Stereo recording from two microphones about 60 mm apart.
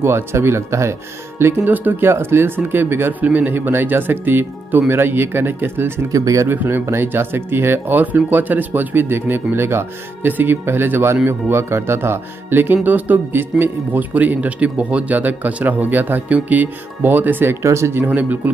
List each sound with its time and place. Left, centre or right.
0.0 s speech: right
1.4 s speech: right
6.1 s speech: right
6.5 s speech: right
8.0 s speech: right
17.6 s speech: right
17.9 s speech: right